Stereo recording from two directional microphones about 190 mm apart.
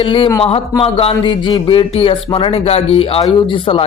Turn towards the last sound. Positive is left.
turn(degrees=30)  # may be behind; listen again after turning